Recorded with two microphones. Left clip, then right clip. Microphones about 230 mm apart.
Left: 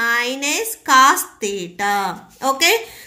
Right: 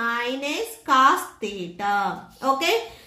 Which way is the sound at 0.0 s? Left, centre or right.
Left.